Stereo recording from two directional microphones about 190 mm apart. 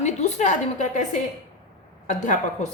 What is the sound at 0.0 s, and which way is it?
A woman's voice, 35° left (ahead or behind).